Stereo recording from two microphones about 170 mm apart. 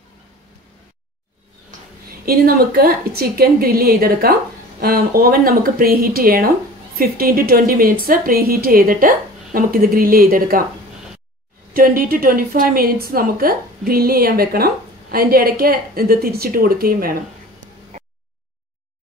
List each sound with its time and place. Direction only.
2.0 s a woman's voice: 60° right (ahead or behind)
11.7 s a woman's voice: 55° right (ahead or behind)